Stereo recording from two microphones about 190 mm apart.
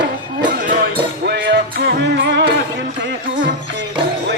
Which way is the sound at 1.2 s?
60° right (ahead or behind).